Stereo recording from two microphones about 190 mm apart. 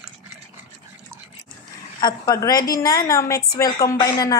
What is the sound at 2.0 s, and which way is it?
A woman's voice, 20° left (ahead or behind).